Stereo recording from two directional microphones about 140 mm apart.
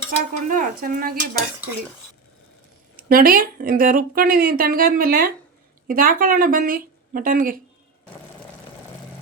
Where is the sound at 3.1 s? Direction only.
90° right.